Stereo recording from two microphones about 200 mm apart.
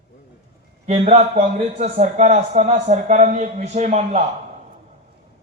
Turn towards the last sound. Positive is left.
turn(degrees=-35)  # may be behind; listen again after turning